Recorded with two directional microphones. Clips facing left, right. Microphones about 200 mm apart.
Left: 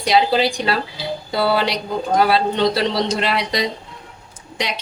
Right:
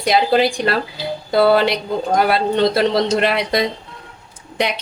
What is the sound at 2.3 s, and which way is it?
A man's voice, 50° right (ahead or behind).